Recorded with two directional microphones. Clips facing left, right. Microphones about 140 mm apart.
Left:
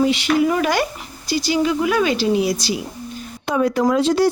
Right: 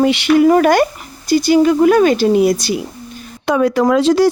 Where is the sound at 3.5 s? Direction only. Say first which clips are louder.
Right 4 dB; 90° right.